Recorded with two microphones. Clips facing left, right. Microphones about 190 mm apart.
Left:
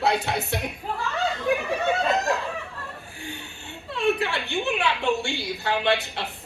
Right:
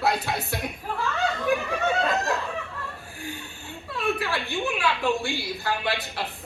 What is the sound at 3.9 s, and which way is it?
A woman's voice, 25° left (ahead or behind).